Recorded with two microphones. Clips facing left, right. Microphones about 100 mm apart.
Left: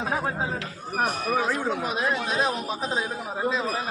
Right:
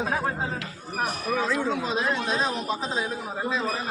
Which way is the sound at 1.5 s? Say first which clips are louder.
Even; 55° left (ahead or behind).